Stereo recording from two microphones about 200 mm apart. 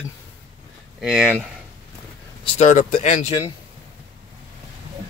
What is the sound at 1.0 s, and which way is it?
Speech, 5° right (ahead or behind).